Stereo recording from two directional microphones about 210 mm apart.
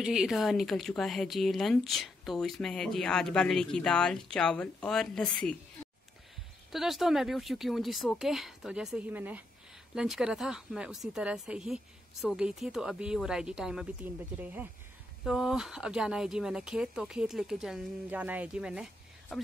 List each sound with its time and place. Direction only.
0.0 s speech: 5° right (ahead or behind)
6.7 s speech: centre (ahead or behind)